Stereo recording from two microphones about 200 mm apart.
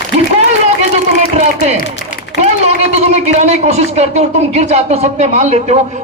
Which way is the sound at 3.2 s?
35° right (ahead or behind).